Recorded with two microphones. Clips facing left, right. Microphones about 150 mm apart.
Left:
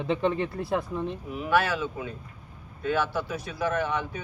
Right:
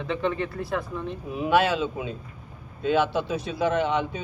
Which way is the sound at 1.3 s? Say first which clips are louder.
Right 4 dB; 20° right (ahead or behind).